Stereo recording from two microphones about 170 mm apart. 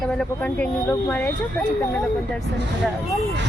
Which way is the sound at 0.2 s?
10° left (ahead or behind).